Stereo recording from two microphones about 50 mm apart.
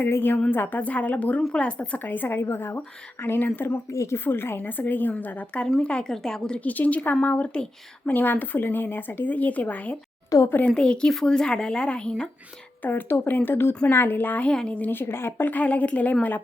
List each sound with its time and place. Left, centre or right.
0.1 s a woman's voice: left
3.9 s a woman's voice: left
4.2 s a woman's voice: left
6.1 s speech: centre
6.7 s a woman's voice: left
8.0 s a woman's voice: left
10.7 s speech: centre
12.8 s a woman's voice: left
14.4 s speech: centre
14.8 s speech: left
15.4 s a woman's voice: left